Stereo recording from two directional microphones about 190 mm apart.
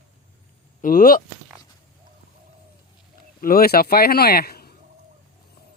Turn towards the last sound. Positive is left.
turn(degrees=55)  # may be behind; listen again after turning